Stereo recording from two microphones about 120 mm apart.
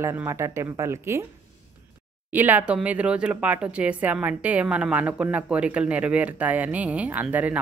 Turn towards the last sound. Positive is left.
turn(degrees=-10)  # may be behind; listen again after turning